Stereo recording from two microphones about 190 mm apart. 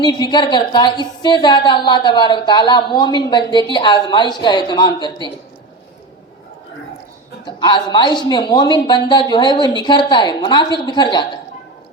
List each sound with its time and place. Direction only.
0.0 s a woman's voice: 20° left (ahead or behind)
7.4 s a woman's voice: 25° left (ahead or behind)